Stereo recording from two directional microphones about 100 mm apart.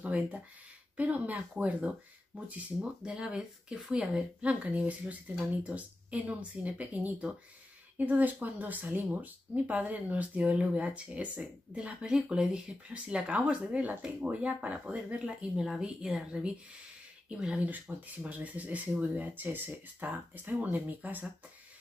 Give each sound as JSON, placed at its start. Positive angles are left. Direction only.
{"t": 0.0, "sound": "speech", "side_deg": -15}